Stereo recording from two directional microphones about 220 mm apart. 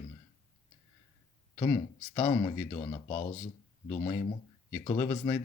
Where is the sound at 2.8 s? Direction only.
30° left (ahead or behind).